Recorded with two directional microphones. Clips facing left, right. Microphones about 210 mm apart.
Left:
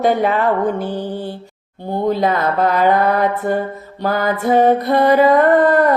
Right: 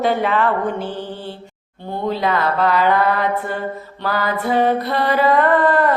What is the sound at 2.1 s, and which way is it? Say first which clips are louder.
Mantra: left 2 dB; 45° left (ahead or behind).